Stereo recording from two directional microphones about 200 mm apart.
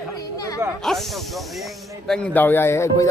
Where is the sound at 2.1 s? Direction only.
5° left (ahead or behind).